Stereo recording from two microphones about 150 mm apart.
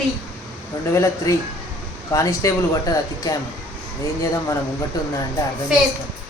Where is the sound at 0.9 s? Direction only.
20° left (ahead or behind).